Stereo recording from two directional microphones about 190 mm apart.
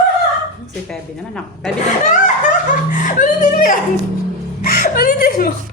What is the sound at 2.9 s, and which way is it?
Speech, 40° left (ahead or behind).